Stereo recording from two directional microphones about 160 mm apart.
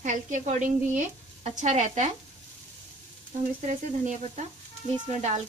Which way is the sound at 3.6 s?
50° right (ahead or behind).